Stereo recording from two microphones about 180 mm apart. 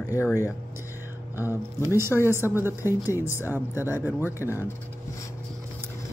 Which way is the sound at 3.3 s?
15° left (ahead or behind).